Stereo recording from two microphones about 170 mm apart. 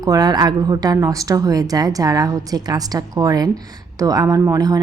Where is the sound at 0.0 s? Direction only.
20° right (ahead or behind).